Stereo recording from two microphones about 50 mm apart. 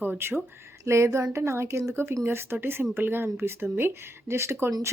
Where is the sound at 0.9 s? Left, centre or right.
Right.